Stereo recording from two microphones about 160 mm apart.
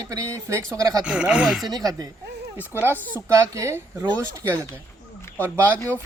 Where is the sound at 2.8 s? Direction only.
10° right (ahead or behind).